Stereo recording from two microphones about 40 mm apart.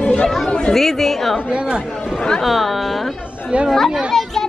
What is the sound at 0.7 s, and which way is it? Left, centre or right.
Speech, centre.